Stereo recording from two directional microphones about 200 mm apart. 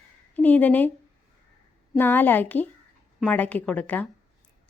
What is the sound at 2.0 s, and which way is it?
A woman's voice, 10° left (ahead or behind).